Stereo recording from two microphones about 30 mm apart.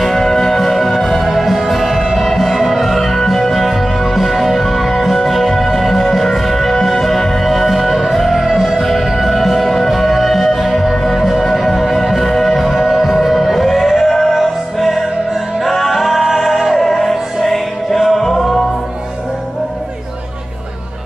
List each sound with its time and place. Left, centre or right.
0.0 s music: centre
1.3 s music: centre
16.7 s music: centre